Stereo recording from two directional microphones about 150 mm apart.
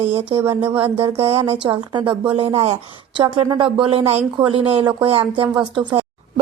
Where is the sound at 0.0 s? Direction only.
40° right (ahead or behind).